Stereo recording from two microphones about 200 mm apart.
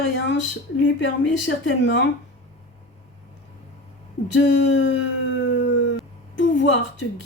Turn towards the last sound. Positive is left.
turn(degrees=65)  # may be behind; listen again after turning